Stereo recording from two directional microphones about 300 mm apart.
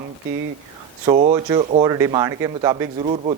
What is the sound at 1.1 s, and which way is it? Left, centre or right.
A man's voice, centre.